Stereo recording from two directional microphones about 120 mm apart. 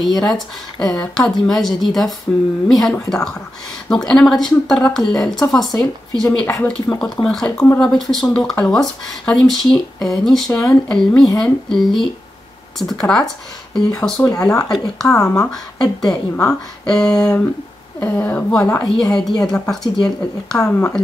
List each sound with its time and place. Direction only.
0.0 s a woman's voice: centre (ahead or behind)
7.5 s speech: 20° left (ahead or behind)
7.8 s a woman's voice: 5° left (ahead or behind)